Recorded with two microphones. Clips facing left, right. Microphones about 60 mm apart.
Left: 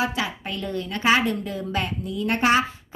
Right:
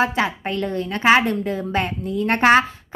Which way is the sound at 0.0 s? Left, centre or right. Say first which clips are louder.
Right 6 dB; right.